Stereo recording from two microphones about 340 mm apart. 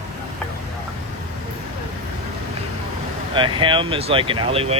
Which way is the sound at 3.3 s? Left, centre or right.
Centre.